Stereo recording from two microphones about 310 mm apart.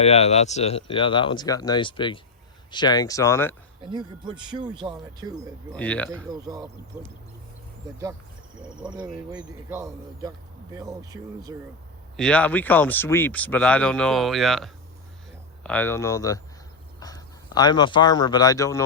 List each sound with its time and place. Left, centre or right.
0.0 s speech: centre
3.8 s speech: centre
5.7 s speech: centre
6.3 s speech: centre
8.8 s speech: centre
12.1 s speech: centre